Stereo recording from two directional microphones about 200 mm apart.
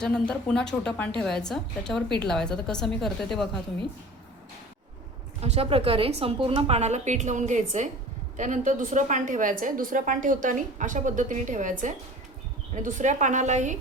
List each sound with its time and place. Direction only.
0.0 s a woman's voice: 5° left (ahead or behind)
5.4 s a woman's voice: 30° right (ahead or behind)